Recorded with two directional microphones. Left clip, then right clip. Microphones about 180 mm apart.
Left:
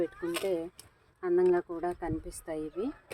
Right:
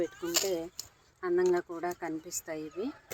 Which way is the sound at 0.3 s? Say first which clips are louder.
Even; 20° left (ahead or behind).